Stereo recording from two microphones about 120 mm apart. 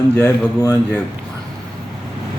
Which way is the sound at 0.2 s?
20° left (ahead or behind).